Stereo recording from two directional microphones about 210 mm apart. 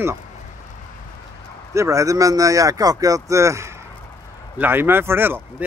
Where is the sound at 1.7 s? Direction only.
15° right (ahead or behind).